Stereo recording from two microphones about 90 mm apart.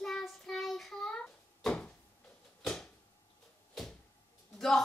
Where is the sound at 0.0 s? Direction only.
5° left (ahead or behind).